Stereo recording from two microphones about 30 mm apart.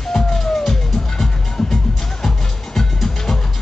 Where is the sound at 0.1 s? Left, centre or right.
Centre.